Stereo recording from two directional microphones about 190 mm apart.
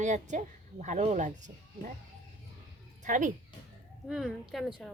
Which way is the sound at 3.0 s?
45° right (ahead or behind).